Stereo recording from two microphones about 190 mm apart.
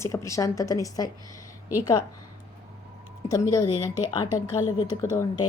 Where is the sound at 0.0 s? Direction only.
15° left (ahead or behind).